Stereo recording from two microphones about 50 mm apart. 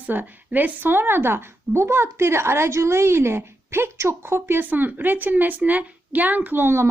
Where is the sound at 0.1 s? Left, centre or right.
Right.